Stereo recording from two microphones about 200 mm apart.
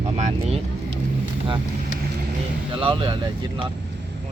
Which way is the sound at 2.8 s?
25° right (ahead or behind).